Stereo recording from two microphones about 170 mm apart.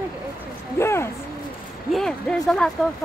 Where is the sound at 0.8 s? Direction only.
15° left (ahead or behind).